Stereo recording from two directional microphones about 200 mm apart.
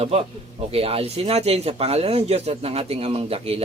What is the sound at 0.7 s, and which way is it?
A man's voice, 30° right (ahead or behind).